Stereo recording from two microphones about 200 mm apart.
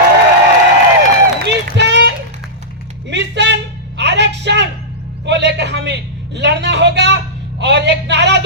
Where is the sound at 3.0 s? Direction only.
60° right (ahead or behind).